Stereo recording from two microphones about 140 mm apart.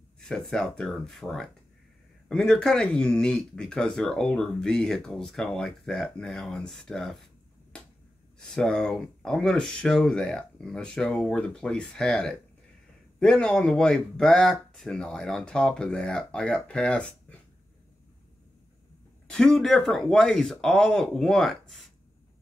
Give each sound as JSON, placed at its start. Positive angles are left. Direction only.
{"t": 0.2, "sound": "speech", "side_deg": 5}
{"t": 8.4, "sound": "speech", "side_deg": 5}
{"t": 19.2, "sound": "speech", "side_deg": 5}